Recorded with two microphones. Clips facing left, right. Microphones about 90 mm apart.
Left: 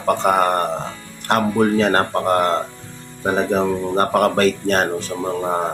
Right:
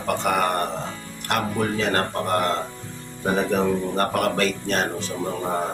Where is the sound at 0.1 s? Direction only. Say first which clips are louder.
Left 6 dB; 35° left (ahead or behind).